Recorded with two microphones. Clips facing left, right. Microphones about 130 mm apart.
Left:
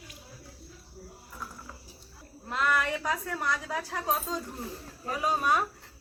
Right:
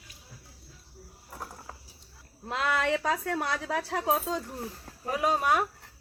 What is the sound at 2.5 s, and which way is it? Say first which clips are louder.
A woman's voice: right 1 dB; 80° right.